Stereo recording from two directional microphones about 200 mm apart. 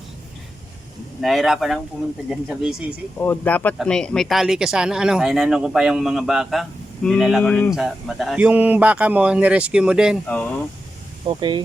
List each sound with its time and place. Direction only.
1.2 s speech: centre (ahead or behind)
3.2 s speech: 10° left (ahead or behind)
10.2 s speech: 10° left (ahead or behind)
11.3 s speech: 20° right (ahead or behind)